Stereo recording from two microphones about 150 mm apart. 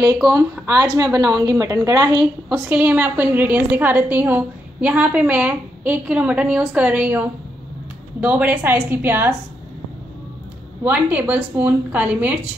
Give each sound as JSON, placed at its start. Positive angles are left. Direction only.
{"t": 0.0, "sound": "speech", "side_deg": -25}
{"t": 2.5, "sound": "a woman's voice", "side_deg": -10}
{"t": 10.8, "sound": "a woman's voice", "side_deg": -10}